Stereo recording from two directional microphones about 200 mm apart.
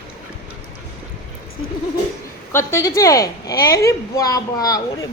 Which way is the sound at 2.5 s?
15° left (ahead or behind).